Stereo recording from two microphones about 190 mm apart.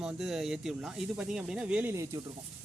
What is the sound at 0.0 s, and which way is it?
Speech, 5° right (ahead or behind).